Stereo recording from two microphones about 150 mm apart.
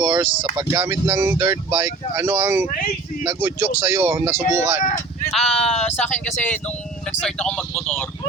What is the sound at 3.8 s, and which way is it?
Speech, 10° right (ahead or behind).